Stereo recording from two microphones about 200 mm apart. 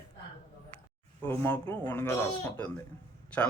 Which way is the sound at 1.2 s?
10° left (ahead or behind).